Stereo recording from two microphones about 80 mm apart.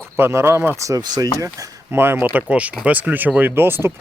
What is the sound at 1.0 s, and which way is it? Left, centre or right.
Speech, right.